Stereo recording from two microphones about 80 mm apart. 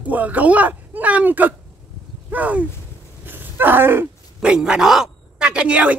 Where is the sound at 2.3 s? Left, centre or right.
Right.